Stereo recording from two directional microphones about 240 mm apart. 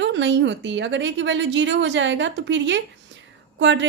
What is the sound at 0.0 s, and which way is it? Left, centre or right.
Speech, right.